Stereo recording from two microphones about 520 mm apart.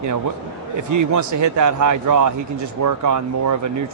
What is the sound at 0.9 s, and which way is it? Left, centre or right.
Speech, right.